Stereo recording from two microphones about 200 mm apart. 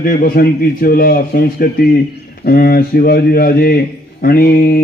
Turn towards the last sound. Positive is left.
turn(degrees=50)  # may be behind; listen again after turning